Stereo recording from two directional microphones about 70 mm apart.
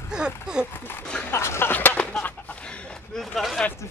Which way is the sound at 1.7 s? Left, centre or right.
Left.